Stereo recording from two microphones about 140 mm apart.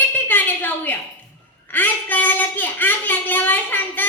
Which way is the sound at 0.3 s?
15° left (ahead or behind).